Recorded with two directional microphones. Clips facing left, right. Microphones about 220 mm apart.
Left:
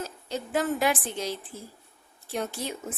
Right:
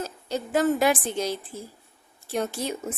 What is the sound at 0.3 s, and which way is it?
A woman's voice, 40° right (ahead or behind).